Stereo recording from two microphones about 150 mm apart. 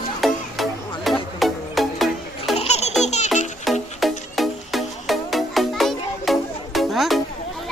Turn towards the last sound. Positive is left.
turn(degrees=0)  # may be behind; listen again after turning